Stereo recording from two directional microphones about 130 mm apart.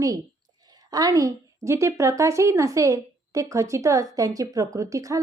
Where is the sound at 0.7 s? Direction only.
30° right (ahead or behind).